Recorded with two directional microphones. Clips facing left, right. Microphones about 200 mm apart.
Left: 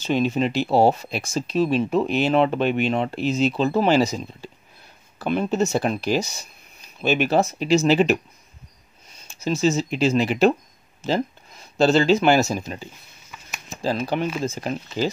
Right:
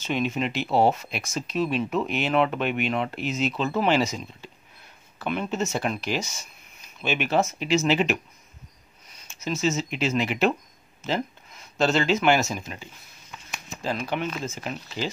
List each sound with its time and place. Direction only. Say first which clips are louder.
0.0 s speech: left 5 dB; 35° left (ahead or behind)
13.3 s a sound: even; 5° left (ahead or behind)
13.7 s speech: left 5 dB; 35° left (ahead or behind)